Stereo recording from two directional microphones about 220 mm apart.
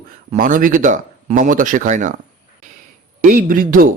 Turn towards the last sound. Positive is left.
turn(degrees=-40)  # may be behind; listen again after turning